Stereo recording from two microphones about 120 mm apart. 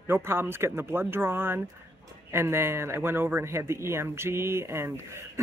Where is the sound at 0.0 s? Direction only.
20° right (ahead or behind).